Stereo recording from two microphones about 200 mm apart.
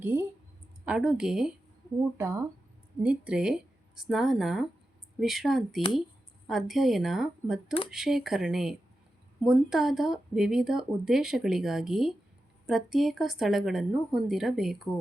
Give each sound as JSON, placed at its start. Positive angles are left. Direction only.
{"t": 0.0, "sound": "a woman's voice", "side_deg": -10}
{"t": 2.1, "sound": "a woman's voice", "side_deg": -15}